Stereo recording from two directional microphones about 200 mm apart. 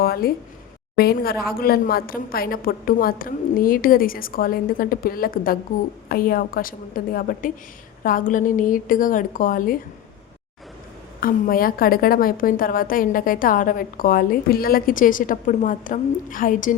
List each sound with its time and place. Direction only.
0.0 s a sound: 50° left (ahead or behind)
0.9 s a woman's voice: 50° left (ahead or behind)
11.2 s a woman's voice: 45° left (ahead or behind)